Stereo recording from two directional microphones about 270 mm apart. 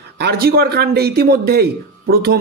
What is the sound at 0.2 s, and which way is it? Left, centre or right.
Speech, right.